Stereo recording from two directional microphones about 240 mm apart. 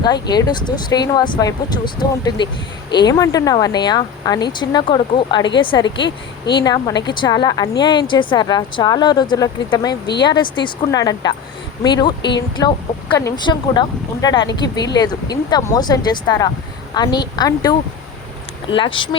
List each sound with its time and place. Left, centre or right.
0.0 s a woman's voice: centre